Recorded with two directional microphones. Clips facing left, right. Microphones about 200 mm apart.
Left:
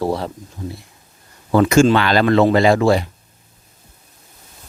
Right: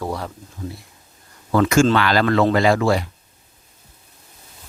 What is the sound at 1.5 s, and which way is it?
Speech, 20° left (ahead or behind).